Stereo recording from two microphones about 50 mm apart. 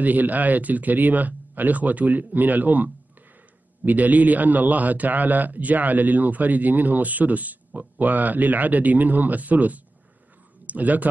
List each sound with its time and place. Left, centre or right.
0.0 s a man's voice: right